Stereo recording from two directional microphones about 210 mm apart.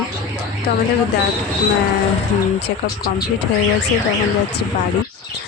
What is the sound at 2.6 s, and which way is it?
Speech, 50° left (ahead or behind).